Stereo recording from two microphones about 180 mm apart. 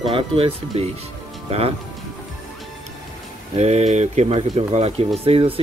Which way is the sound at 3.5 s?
35° right (ahead or behind).